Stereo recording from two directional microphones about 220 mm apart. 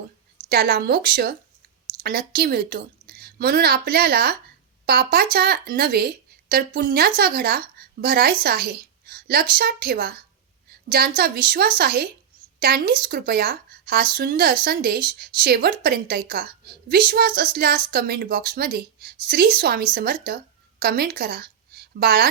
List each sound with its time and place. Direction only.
0.4 s a woman's voice: 45° right (ahead or behind)
10.7 s a sound: 45° right (ahead or behind)
11.2 s a woman's voice: 45° right (ahead or behind)